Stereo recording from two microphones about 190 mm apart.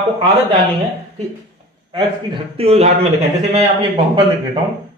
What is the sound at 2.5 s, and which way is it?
A man's voice, 30° right (ahead or behind).